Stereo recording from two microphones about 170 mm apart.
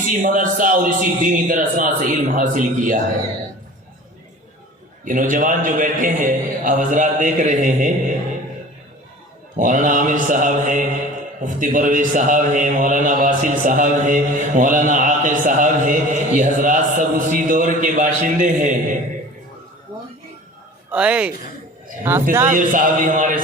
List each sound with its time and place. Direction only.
0.1 s a man's voice: 50° right (ahead or behind)
5.0 s a man's voice: 50° right (ahead or behind)
9.6 s a man's voice: 50° right (ahead or behind)
20.9 s a man's voice: 5° right (ahead or behind)
22.4 s a man's voice: 50° right (ahead or behind)